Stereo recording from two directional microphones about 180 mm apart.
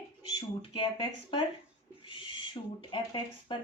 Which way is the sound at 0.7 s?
30° left (ahead or behind).